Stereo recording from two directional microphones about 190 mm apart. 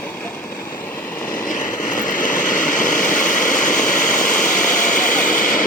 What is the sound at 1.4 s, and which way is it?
Vehicle, 45° left (ahead or behind).